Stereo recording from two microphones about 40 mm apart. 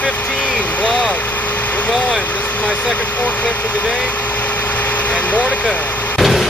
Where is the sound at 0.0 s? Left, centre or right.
Left.